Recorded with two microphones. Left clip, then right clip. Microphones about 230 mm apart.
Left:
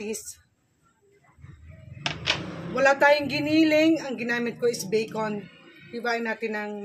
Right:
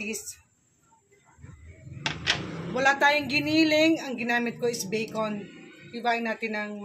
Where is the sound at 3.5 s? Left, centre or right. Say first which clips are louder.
Left 2 dB; centre.